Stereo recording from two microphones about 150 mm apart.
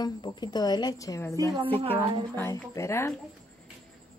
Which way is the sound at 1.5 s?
35° right (ahead or behind).